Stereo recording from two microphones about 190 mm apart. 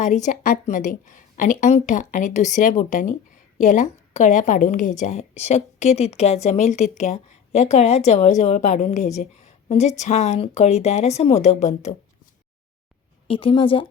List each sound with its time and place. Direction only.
0.0 s a woman's voice: 40° left (ahead or behind)
13.2 s a woman's voice: 30° left (ahead or behind)